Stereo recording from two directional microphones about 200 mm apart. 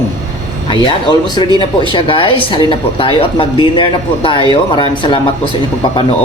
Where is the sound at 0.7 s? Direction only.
20° left (ahead or behind).